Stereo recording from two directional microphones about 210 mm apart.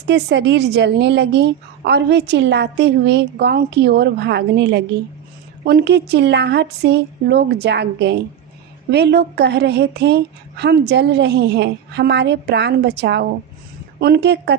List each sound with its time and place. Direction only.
0.1 s a woman's voice: 55° right (ahead or behind)